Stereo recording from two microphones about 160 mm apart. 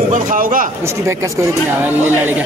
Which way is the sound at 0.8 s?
20° right (ahead or behind).